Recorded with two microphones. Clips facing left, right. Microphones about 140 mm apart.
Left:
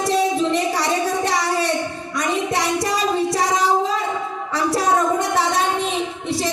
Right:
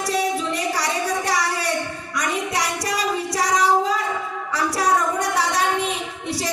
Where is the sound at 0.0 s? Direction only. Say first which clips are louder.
Left 4 dB; 25° left (ahead or behind).